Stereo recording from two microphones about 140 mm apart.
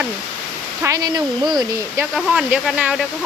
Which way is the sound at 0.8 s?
25° right (ahead or behind).